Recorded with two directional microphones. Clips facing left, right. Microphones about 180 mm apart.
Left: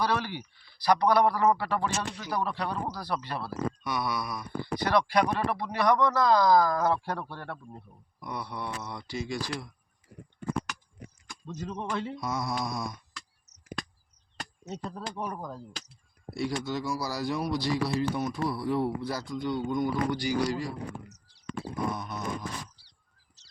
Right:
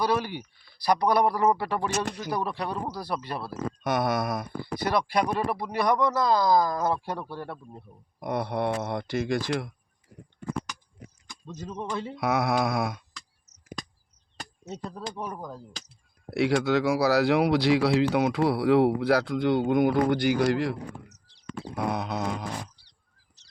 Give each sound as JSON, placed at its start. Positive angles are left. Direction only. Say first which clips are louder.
{"t": 0.0, "sound": "speech", "louder": "right 3 dB", "side_deg": -15}
{"t": 2.0, "sound": "speech", "louder": "right 5 dB", "side_deg": -40}
{"t": 2.3, "sound": "speech", "louder": "left 1 dB", "side_deg": -10}
{"t": 3.8, "sound": "speech", "louder": "right 11 dB", "side_deg": -50}
{"t": 5.5, "sound": "speech", "louder": "even", "side_deg": -10}
{"t": 8.2, "sound": "speech", "louder": "right 9 dB", "side_deg": -55}
{"t": 11.4, "sound": "speech", "louder": "left 1 dB", "side_deg": 0}
{"t": 12.2, "sound": "speech", "louder": "right 7 dB", "side_deg": -70}
{"t": 14.3, "sound": "speech", "louder": "even", "side_deg": 0}
{"t": 16.3, "sound": "speech", "louder": "right 8 dB", "side_deg": -70}
{"t": 21.8, "sound": "speech", "louder": "right 5 dB", "side_deg": -75}